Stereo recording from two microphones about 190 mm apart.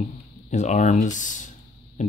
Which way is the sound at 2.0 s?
40° left (ahead or behind).